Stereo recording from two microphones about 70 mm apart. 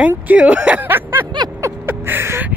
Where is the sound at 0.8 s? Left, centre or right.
Right.